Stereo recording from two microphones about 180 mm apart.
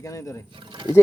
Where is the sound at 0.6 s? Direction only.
25° right (ahead or behind).